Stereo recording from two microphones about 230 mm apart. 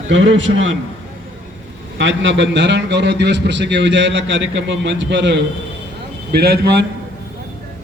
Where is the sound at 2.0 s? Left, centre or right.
Right.